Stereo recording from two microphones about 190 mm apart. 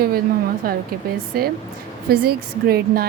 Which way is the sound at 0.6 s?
50° right (ahead or behind).